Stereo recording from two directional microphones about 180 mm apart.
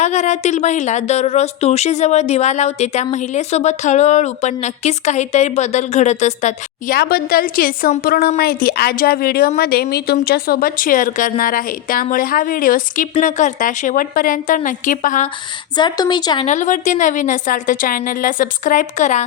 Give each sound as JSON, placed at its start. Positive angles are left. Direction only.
{"t": 0.0, "sound": "speech", "side_deg": 40}
{"t": 6.9, "sound": "a woman's voice", "side_deg": 60}
{"t": 15.7, "sound": "speech", "side_deg": 25}
{"t": 16.5, "sound": "speech", "side_deg": 45}